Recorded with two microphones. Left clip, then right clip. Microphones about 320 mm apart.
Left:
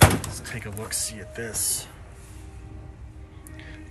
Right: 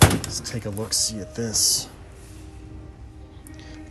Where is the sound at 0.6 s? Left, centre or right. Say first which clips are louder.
Right 9 dB; centre.